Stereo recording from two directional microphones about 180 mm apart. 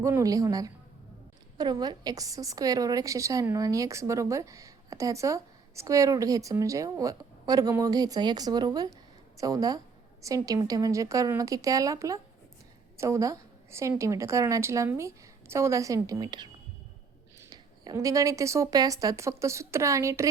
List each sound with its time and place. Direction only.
0.0 s a woman's voice: 20° right (ahead or behind)
17.5 s a woman's voice: 20° right (ahead or behind)